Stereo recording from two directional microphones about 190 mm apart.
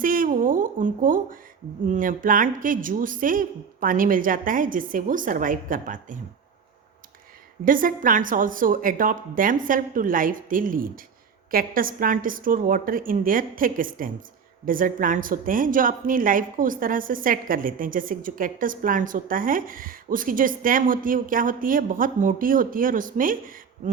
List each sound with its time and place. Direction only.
0.0 s a woman's voice: 45° right (ahead or behind)
7.6 s a woman's voice: 45° right (ahead or behind)